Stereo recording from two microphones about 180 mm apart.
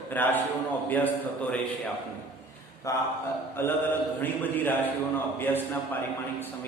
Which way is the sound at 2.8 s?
20° left (ahead or behind).